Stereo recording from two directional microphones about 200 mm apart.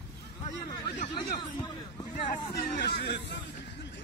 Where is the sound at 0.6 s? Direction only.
20° left (ahead or behind).